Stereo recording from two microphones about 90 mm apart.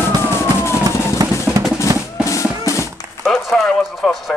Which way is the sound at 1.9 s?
45° right (ahead or behind).